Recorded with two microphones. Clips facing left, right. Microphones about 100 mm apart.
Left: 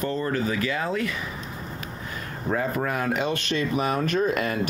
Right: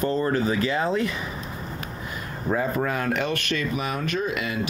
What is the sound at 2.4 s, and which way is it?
Speech, centre (ahead or behind).